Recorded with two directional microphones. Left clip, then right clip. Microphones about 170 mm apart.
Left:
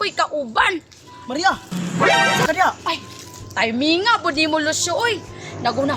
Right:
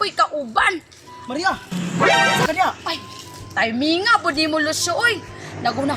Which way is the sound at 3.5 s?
45° left (ahead or behind).